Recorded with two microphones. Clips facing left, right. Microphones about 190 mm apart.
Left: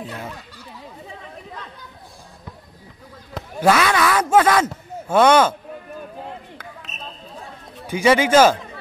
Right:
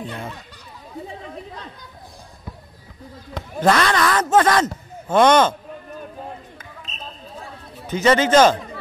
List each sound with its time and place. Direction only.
0.0 s speech: centre (ahead or behind)
3.3 s speech: 5° left (ahead or behind)
7.8 s speech: 10° left (ahead or behind)